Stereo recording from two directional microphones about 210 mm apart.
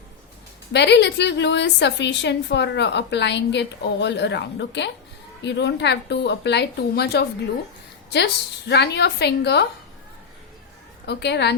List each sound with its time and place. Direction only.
0.7 s a woman's voice: 55° left (ahead or behind)
11.0 s a woman's voice: 55° left (ahead or behind)